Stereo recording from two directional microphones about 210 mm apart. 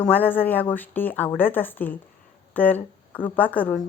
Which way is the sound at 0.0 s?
10° left (ahead or behind).